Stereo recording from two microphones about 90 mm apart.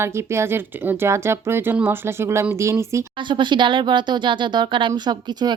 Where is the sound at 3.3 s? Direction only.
60° right (ahead or behind).